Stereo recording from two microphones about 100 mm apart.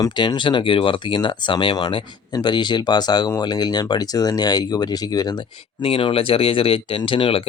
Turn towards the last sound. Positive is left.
turn(degrees=65)  # may be behind; listen again after turning